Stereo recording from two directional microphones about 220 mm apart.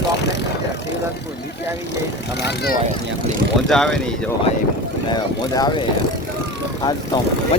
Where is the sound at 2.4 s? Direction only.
45° left (ahead or behind).